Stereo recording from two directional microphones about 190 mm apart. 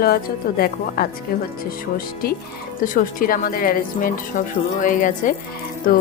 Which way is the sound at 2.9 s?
50° left (ahead or behind).